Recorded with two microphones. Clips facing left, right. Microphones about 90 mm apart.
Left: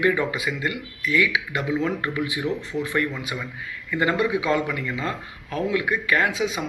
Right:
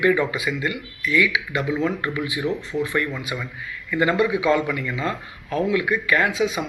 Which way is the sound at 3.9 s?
30° left (ahead or behind).